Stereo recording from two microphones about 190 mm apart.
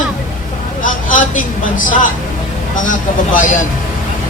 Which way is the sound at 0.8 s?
45° left (ahead or behind).